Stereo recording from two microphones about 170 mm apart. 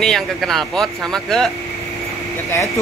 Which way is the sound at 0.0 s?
Centre (ahead or behind).